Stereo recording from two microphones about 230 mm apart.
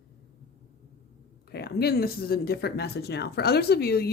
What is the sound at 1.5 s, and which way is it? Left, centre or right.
Speech, left.